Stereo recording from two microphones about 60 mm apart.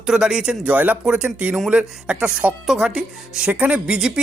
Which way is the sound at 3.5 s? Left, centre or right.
Right.